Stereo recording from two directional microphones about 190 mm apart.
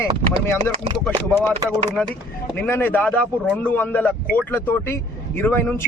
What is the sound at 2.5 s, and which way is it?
A man's voice, 10° left (ahead or behind).